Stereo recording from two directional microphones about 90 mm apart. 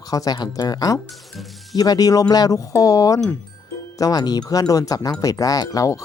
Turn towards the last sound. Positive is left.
turn(degrees=40)  # may be behind; listen again after turning